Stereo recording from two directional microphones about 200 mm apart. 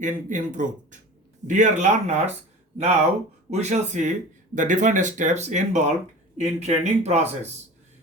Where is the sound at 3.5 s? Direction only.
35° right (ahead or behind).